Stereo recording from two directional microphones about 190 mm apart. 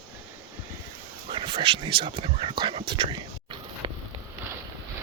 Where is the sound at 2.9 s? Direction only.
25° right (ahead or behind).